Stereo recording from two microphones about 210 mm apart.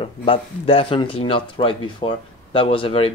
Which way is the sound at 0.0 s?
25° left (ahead or behind).